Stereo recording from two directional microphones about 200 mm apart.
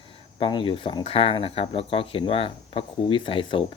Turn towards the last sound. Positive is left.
turn(degrees=25)  # may be behind; listen again after turning